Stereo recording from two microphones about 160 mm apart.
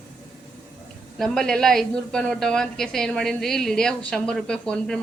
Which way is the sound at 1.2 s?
Centre (ahead or behind).